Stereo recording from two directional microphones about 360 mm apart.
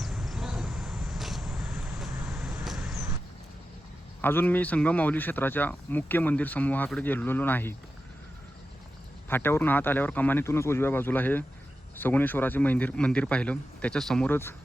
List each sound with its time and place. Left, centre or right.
0.0 s vehicle: centre
4.2 s speech: centre
9.3 s speech: centre